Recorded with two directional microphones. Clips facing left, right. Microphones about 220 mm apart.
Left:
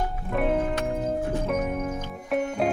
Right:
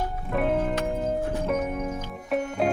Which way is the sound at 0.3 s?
Centre (ahead or behind).